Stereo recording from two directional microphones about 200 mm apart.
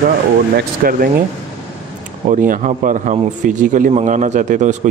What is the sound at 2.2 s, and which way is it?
A man's voice, 40° right (ahead or behind).